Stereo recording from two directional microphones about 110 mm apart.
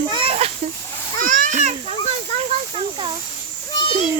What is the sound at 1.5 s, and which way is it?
Children playing, 90° right.